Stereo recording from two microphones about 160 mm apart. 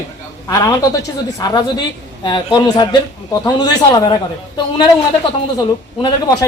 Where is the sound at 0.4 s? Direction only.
20° left (ahead or behind).